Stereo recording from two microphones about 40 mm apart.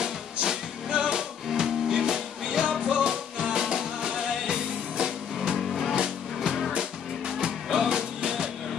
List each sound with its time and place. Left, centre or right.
0.0 s music: centre
5.6 s music: centre
5.9 s music: centre